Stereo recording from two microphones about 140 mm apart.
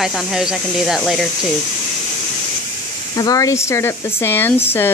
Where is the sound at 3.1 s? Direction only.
25° left (ahead or behind).